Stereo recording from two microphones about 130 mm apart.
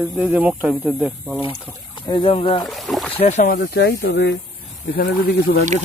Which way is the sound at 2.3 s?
45° left (ahead or behind).